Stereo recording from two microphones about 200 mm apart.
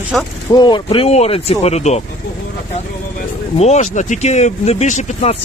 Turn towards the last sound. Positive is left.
turn(degrees=35)  # may be behind; listen again after turning